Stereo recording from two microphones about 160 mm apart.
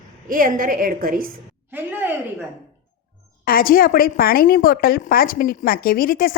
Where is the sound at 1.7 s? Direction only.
10° right (ahead or behind).